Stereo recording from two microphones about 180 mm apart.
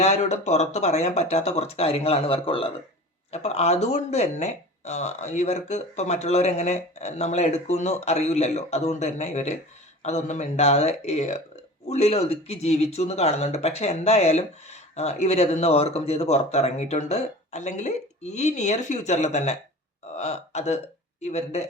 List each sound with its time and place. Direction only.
0.0 s speech: 40° left (ahead or behind)